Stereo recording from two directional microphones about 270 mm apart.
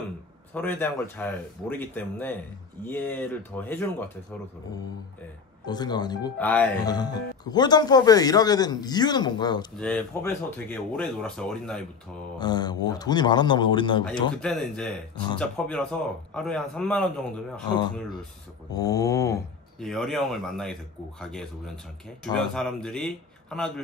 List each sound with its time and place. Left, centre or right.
0.6 s speech: centre
5.7 s speech: centre
9.8 s speech: centre
12.4 s speech: centre
14.3 s speech: centre
17.6 s speech: centre
19.8 s speech: centre